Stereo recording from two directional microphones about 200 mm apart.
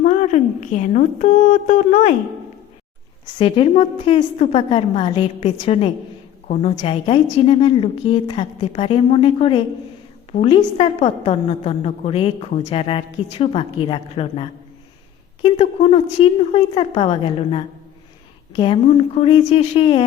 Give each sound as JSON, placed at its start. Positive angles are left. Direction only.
{"t": 0.0, "sound": "a woman's voice", "side_deg": 35}
{"t": 3.3, "sound": "a woman's voice", "side_deg": 25}
{"t": 10.6, "sound": "a woman's voice", "side_deg": 30}